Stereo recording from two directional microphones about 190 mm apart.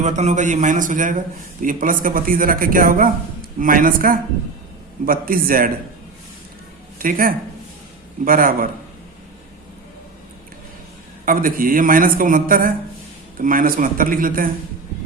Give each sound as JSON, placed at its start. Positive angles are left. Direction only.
{"t": 0.0, "sound": "a man's voice", "side_deg": -40}
{"t": 7.0, "sound": "speech", "side_deg": -45}
{"t": 11.3, "sound": "speech", "side_deg": -50}